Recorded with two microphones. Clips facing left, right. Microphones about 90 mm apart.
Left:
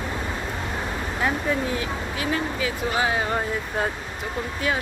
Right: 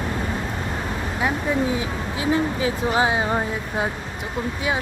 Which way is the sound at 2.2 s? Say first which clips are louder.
Right 5 dB; 25° right (ahead or behind).